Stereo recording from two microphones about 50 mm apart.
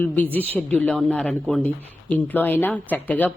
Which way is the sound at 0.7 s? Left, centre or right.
Left.